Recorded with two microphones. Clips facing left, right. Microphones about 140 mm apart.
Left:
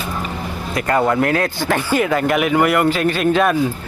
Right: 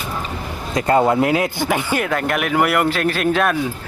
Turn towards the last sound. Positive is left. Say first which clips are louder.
# left 2 dB
turn(degrees=0)  # may be behind; listen again after turning